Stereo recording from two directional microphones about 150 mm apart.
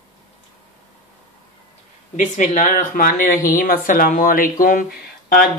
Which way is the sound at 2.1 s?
55° left (ahead or behind).